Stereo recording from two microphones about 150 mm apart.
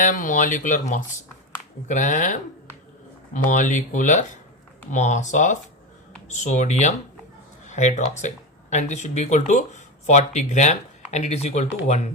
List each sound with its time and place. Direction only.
0.0 s speech: 60° left (ahead or behind)